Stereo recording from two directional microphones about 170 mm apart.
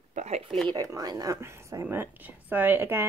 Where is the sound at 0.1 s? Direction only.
40° right (ahead or behind).